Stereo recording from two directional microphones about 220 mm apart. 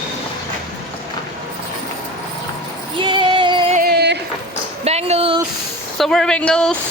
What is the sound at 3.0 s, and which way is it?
Music, 20° right (ahead or behind).